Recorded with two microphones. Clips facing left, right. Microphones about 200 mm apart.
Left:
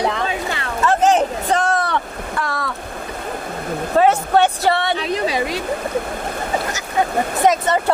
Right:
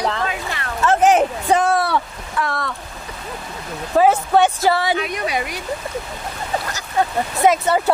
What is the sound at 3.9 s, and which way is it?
A woman's voice, centre (ahead or behind).